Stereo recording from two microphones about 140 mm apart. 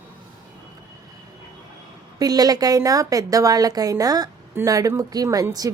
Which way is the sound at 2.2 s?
25° right (ahead or behind).